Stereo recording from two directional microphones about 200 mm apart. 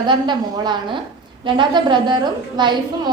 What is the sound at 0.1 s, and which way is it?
A woman's voice, 20° right (ahead or behind).